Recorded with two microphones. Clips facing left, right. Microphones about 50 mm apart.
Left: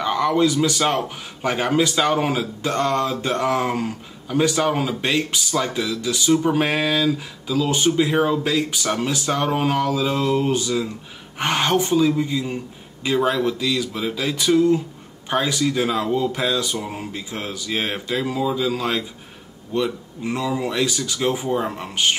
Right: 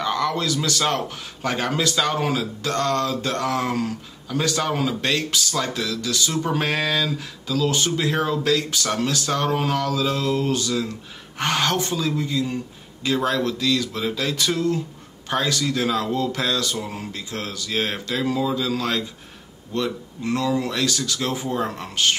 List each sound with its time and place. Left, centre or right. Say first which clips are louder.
0.0 s a man's voice: left 4 dB; centre